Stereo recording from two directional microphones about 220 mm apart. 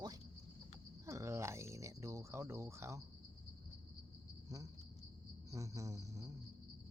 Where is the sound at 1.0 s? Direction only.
10° right (ahead or behind).